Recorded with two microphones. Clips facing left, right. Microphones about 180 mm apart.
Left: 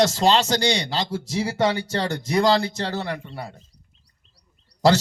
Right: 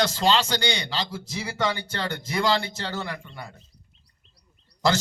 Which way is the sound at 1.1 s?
35° left (ahead or behind).